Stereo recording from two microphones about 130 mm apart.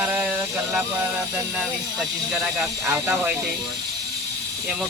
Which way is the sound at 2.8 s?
20° right (ahead or behind).